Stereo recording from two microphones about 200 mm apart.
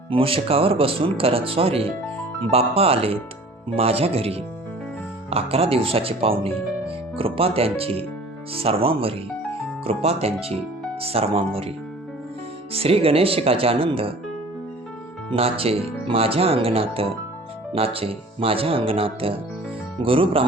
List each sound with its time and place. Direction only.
0.1 s speech: 25° right (ahead or behind)
12.7 s speech: 30° right (ahead or behind)
15.3 s speech: 30° right (ahead or behind)